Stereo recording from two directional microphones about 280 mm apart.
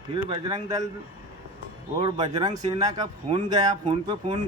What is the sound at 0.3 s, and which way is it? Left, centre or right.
Speech, centre.